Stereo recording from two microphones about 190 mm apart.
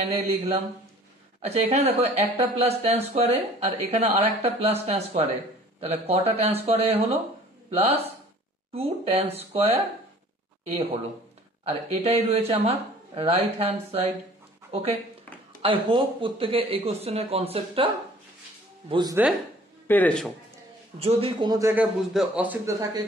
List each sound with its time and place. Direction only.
0.0 s speech: 30° right (ahead or behind)
11.6 s speech: 30° right (ahead or behind)
18.9 s speech: 25° right (ahead or behind)
19.9 s a man's voice: 10° left (ahead or behind)
21.0 s speech: 30° right (ahead or behind); by 21.8 s 15° right (ahead or behind)
22.1 s speech: 5° right (ahead or behind)